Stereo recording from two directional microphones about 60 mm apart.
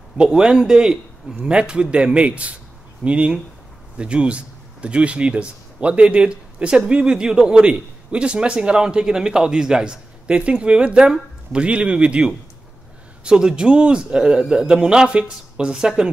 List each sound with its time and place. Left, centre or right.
0.2 s a man's voice: centre